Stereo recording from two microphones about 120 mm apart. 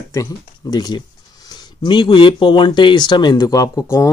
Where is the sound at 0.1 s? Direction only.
30° left (ahead or behind).